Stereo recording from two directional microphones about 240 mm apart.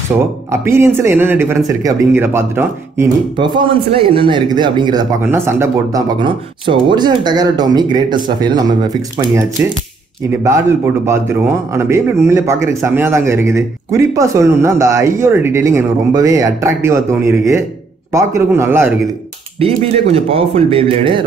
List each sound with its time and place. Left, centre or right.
0.5 s speech: centre
11.1 s speech: centre
19.6 s speech: right